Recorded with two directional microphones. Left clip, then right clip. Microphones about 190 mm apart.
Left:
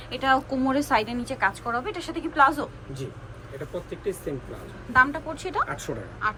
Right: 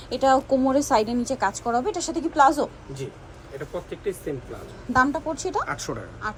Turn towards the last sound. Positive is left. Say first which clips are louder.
# left 4 dB
turn(degrees=-15)  # may be behind; listen again after turning